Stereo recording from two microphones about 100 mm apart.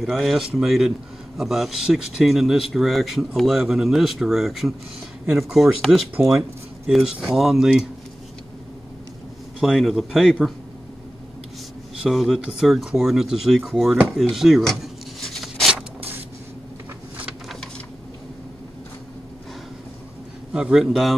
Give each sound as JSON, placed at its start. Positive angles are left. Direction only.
{"t": 0.0, "sound": "speech", "side_deg": 0}
{"t": 9.6, "sound": "speech", "side_deg": -5}
{"t": 12.0, "sound": "speech", "side_deg": 0}
{"t": 14.1, "sound": "a sound", "side_deg": -5}
{"t": 20.5, "sound": "speech", "side_deg": -5}